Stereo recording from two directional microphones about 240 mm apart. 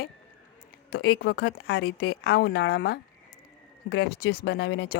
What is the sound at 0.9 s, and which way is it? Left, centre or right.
A woman's voice, left.